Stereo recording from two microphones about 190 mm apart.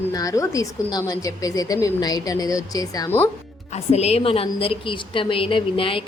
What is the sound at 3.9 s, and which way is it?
A woman's voice, 35° left (ahead or behind).